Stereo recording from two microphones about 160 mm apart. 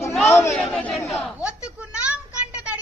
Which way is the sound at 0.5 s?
5° left (ahead or behind).